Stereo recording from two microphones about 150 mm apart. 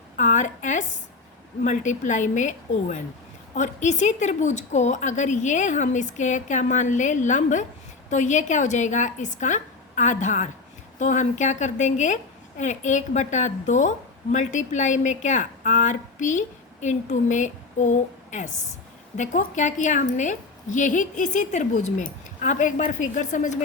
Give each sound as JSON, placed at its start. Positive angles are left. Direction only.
{"t": 0.2, "sound": "a woman's voice", "side_deg": 55}